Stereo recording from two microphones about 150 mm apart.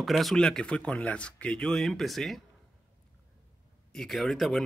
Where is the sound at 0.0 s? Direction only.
Centre (ahead or behind).